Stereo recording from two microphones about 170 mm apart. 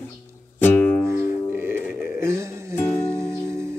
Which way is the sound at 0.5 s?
10° left (ahead or behind).